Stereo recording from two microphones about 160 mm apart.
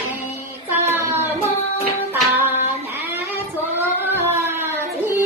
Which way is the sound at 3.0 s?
15° right (ahead or behind).